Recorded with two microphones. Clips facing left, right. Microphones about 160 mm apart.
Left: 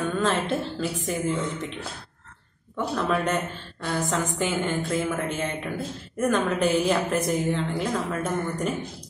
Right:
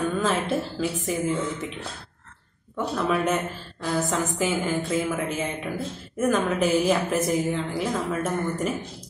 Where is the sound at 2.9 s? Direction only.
5° right (ahead or behind).